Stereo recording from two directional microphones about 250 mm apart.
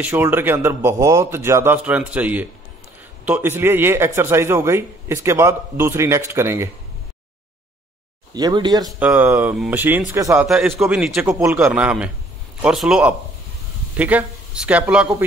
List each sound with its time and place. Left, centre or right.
0.0 s speech: centre
8.3 s speech: centre
9.0 s speech: centre